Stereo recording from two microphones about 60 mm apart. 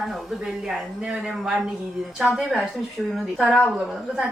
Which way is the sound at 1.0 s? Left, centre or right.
Centre.